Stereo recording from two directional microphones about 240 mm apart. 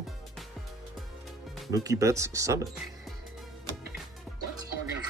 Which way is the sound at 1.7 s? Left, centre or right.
Centre.